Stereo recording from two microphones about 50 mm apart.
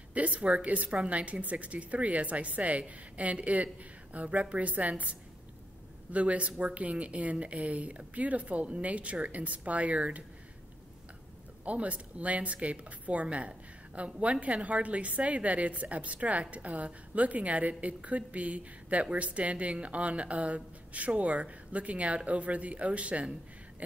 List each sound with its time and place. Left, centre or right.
0.1 s speech: right
6.1 s speech: right
11.6 s speech: right